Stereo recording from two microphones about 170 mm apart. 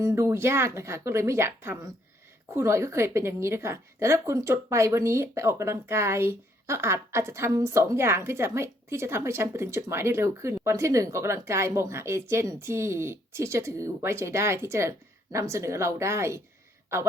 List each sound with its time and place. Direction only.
0.0 s a woman's voice: 20° right (ahead or behind)